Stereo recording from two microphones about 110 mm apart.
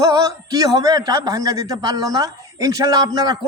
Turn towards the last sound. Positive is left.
turn(degrees=-35)  # may be behind; listen again after turning